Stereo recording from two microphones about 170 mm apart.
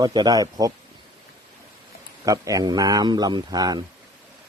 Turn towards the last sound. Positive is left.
turn(degrees=-20)  # may be behind; listen again after turning